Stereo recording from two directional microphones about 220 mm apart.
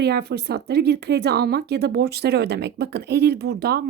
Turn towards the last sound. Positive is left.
turn(degrees=-45)  # may be behind; listen again after turning